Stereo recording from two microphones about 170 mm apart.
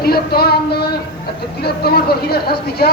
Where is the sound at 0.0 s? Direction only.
65° left (ahead or behind).